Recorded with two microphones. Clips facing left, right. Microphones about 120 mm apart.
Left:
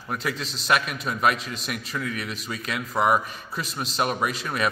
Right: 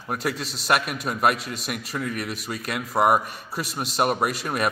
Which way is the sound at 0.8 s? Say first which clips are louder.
Right 1 dB; 5° right (ahead or behind).